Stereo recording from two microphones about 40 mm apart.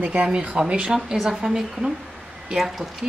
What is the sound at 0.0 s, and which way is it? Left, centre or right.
Speech, right.